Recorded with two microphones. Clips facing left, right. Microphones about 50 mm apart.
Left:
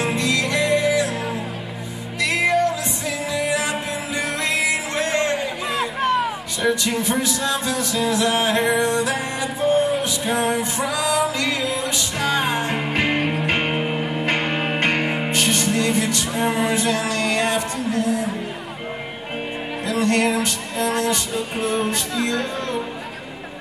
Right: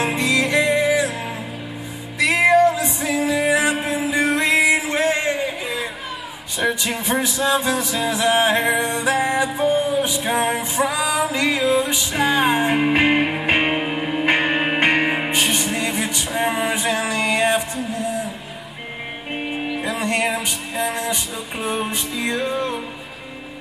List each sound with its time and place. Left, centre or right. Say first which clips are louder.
0.0 s music: right 2 dB; right
5.7 s a sound: left 6 dB; left
6.6 s music: left 1 dB; centre
19.8 s music: left 4 dB; centre